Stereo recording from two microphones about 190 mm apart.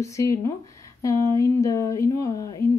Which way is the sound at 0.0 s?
15° left (ahead or behind).